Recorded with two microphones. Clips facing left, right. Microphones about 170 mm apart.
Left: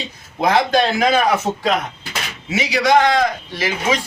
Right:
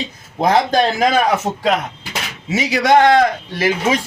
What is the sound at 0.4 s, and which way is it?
Speech, 40° right (ahead or behind).